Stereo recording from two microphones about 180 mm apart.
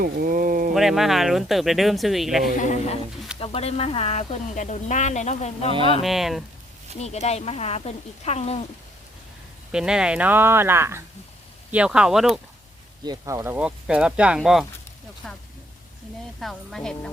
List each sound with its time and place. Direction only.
0.0 s speech: 50° right (ahead or behind)
0.7 s speech: centre (ahead or behind)
2.6 s a man's voice: 45° left (ahead or behind)
6.0 s speech: centre (ahead or behind)
7.0 s speech: 35° left (ahead or behind)
9.7 s speech: 5° right (ahead or behind)
13.1 s speech: 15° right (ahead or behind); by 15.4 s centre (ahead or behind)
16.4 s speech: centre (ahead or behind)